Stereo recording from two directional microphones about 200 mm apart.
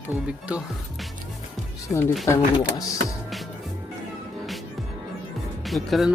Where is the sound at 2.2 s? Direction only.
15° left (ahead or behind).